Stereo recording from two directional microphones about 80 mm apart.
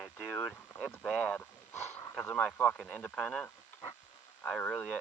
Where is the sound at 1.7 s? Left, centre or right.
Left.